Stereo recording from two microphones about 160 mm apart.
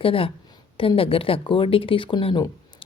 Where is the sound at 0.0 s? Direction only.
35° left (ahead or behind).